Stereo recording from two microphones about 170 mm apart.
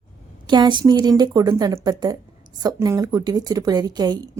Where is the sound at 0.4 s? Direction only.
25° right (ahead or behind).